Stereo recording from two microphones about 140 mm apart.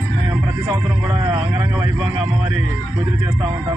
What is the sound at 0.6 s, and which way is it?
Speech, 30° right (ahead or behind).